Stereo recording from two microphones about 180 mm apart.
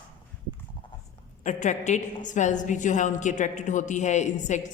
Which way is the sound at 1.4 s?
40° left (ahead or behind).